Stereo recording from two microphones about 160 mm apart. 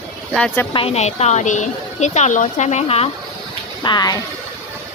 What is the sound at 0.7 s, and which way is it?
A woman's voice, 40° left (ahead or behind).